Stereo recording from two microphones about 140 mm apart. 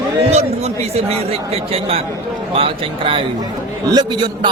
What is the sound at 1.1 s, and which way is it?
Speech, 45° right (ahead or behind).